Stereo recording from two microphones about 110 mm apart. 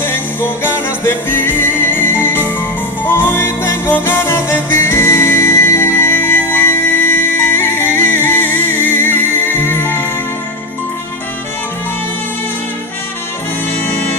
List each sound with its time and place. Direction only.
0.0 s music: 20° left (ahead or behind)